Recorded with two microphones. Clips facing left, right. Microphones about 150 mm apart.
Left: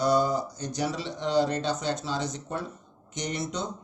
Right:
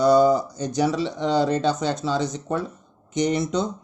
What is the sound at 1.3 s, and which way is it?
Speech, 90° right.